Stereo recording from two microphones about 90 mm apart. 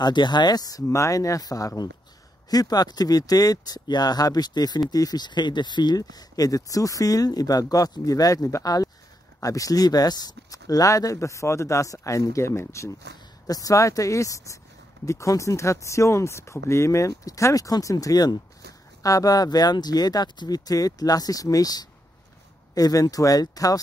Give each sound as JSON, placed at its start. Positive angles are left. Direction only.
{"t": 0.0, "sound": "speech", "side_deg": 55}